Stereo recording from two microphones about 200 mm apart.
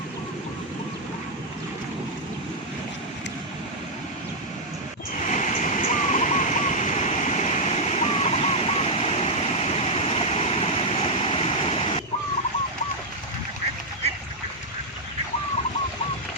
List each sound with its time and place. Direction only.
5.1 s waterfall: 35° left (ahead or behind)